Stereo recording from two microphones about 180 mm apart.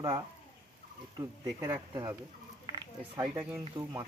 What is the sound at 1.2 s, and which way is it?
Speech, 20° right (ahead or behind).